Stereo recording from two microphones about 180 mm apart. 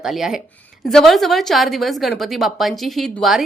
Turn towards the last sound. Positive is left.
turn(degrees=0)  # may be behind; listen again after turning